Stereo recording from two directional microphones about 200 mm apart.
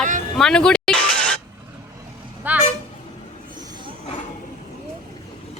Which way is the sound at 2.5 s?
10° right (ahead or behind).